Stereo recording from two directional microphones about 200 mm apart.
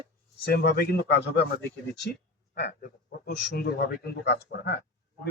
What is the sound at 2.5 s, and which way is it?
Speech, 55° left (ahead or behind).